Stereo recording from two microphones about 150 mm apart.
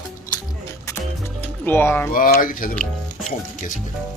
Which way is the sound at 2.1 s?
70° left (ahead or behind).